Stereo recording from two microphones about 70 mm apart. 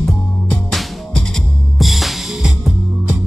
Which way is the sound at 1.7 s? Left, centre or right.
Centre.